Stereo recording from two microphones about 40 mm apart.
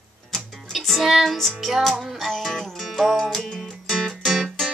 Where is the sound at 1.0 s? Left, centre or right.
Centre.